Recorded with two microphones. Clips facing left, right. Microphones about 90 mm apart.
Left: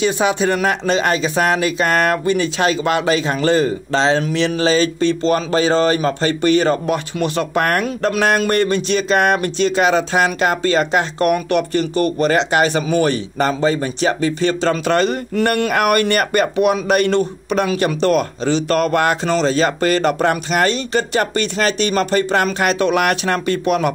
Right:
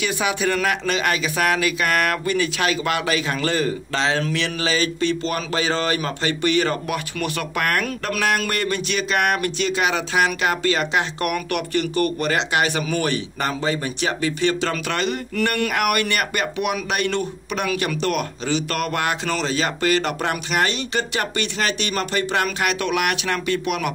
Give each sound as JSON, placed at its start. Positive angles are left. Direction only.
{"t": 0.0, "sound": "speech", "side_deg": 30}